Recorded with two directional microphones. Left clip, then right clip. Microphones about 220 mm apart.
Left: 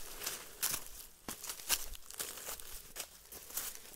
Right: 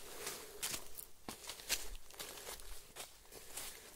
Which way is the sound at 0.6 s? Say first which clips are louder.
Left 5 dB; 45° left (ahead or behind).